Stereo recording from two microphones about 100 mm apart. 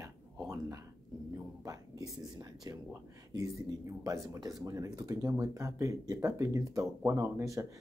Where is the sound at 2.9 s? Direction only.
30° right (ahead or behind).